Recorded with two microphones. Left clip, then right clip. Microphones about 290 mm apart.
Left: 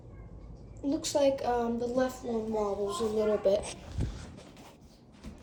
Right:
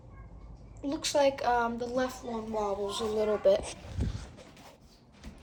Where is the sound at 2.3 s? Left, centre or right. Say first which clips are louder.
Left 2 dB; centre.